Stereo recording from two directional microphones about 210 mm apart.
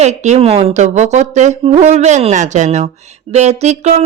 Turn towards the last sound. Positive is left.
turn(degrees=-30)  # may be behind; listen again after turning